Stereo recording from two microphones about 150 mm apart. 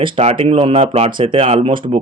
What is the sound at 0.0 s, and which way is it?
A man's voice, 40° right (ahead or behind).